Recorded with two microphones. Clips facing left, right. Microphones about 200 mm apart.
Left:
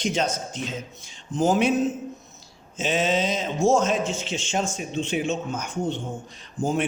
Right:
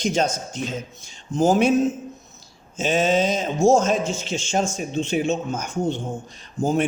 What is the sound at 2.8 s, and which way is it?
A man's voice, 45° right (ahead or behind).